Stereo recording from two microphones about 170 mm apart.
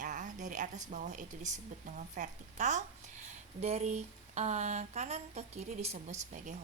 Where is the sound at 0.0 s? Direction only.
45° right (ahead or behind).